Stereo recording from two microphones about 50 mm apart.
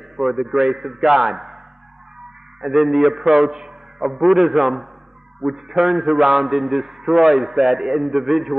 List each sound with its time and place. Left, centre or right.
0.2 s a man's voice: centre
2.6 s a man's voice: centre